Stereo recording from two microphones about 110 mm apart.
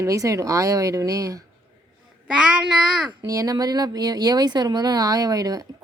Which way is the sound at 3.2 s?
30° right (ahead or behind).